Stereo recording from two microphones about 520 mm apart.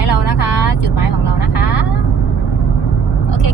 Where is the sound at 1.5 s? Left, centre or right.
Left.